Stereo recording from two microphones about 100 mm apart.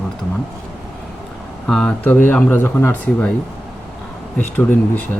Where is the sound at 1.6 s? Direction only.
10° left (ahead or behind).